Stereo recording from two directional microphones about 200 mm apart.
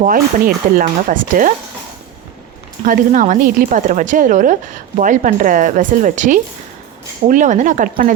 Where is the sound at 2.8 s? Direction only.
40° right (ahead or behind).